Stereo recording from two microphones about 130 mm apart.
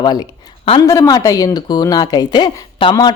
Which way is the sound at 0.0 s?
35° left (ahead or behind).